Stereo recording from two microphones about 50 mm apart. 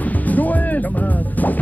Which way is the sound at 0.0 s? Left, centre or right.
Left.